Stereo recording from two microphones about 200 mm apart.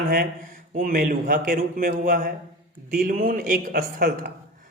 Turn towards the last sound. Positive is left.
turn(degrees=-50)  # may be behind; listen again after turning